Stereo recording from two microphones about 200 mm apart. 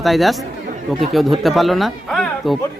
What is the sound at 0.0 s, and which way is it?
Speech, centre (ahead or behind).